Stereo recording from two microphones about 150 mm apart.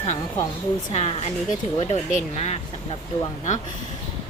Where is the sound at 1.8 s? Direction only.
45° left (ahead or behind).